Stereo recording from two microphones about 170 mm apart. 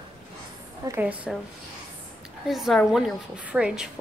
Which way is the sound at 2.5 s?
Centre (ahead or behind).